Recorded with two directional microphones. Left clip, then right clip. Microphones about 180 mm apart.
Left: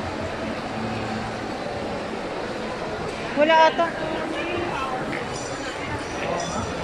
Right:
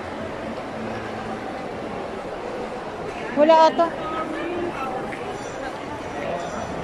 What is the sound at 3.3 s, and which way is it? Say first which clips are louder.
Speech: right 2 dB; 15° right (ahead or behind).